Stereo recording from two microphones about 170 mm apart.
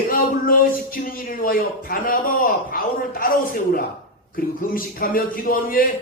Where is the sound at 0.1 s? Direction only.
55° left (ahead or behind).